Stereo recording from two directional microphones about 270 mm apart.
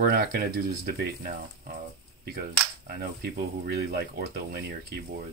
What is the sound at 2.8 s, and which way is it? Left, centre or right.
Speech, right.